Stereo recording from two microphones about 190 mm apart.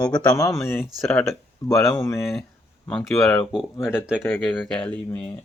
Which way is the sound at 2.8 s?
Centre (ahead or behind).